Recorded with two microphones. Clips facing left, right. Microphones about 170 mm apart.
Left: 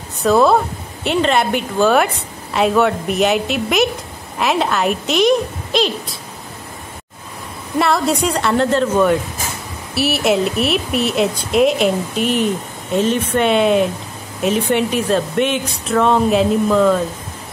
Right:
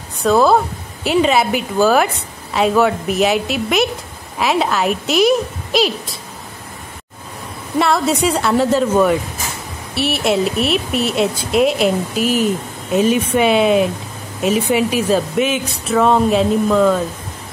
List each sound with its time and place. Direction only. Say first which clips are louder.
0.2 s a woman's voice: even; centre (ahead or behind)
7.8 s a woman's voice: right 1 dB; centre (ahead or behind)